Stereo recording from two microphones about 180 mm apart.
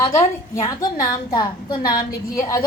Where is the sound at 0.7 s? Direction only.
20° left (ahead or behind).